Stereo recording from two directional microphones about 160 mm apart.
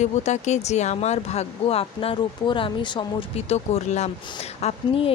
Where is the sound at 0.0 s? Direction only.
45° left (ahead or behind).